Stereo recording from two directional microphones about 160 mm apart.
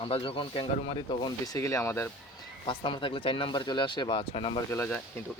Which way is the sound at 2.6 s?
30° left (ahead or behind).